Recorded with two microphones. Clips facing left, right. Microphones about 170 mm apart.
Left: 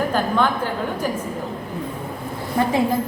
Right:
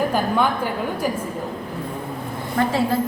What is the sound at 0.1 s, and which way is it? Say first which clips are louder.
Speech: even; 10° right (ahead or behind).